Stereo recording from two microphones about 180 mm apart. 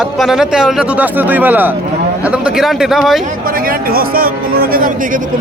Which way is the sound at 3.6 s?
55° right (ahead or behind).